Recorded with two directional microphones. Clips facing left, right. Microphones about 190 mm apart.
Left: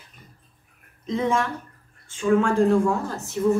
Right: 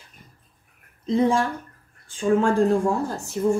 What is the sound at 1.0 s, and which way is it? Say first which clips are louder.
Speech: right 3 dB; 35° right (ahead or behind).